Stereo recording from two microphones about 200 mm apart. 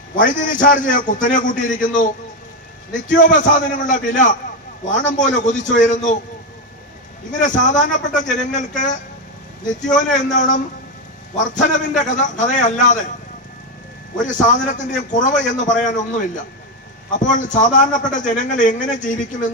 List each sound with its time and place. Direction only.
0.2 s a man's voice: 40° left (ahead or behind)
7.3 s a man's voice: 40° left (ahead or behind)
14.3 s a man's voice: 40° left (ahead or behind)